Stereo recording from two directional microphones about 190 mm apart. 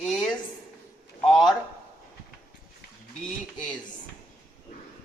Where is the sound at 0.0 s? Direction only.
Centre (ahead or behind).